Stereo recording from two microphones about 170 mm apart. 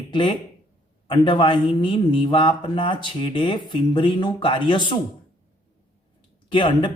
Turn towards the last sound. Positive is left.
turn(degrees=30)  # may be behind; listen again after turning